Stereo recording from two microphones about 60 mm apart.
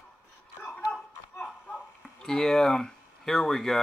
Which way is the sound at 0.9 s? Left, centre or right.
Centre.